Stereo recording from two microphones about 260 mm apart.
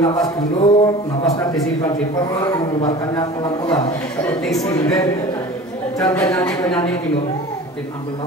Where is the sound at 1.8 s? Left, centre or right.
Centre.